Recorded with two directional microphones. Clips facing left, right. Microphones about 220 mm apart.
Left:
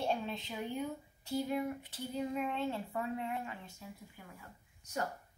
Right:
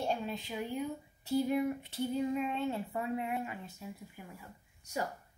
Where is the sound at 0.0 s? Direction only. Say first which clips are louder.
Right 1 dB; centre (ahead or behind).